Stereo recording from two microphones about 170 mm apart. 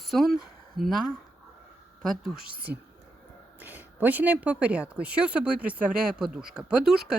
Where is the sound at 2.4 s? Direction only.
60° right (ahead or behind).